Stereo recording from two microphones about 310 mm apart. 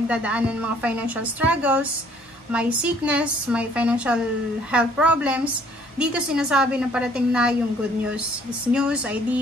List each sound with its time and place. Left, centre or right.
0.1 s a woman's voice: centre
8.7 s a woman's voice: centre